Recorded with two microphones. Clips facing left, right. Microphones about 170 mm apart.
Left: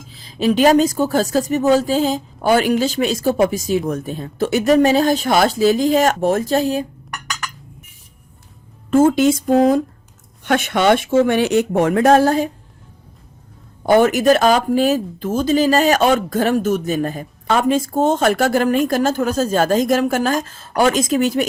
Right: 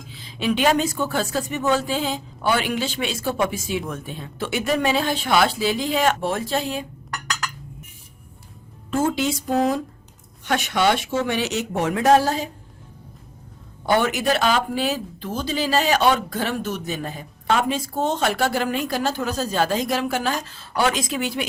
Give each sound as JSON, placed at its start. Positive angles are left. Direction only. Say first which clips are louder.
{"t": 0.1, "sound": "a woman's voice", "louder": "left 6 dB", "side_deg": 40}
{"t": 7.1, "sound": "a sound", "louder": "even", "side_deg": 0}
{"t": 8.9, "sound": "speech", "louder": "left 9 dB", "side_deg": 50}
{"t": 13.8, "sound": "speech", "louder": "left 8 dB", "side_deg": 45}